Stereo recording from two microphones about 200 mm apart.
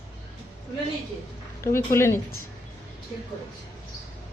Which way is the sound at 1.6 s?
15° left (ahead or behind).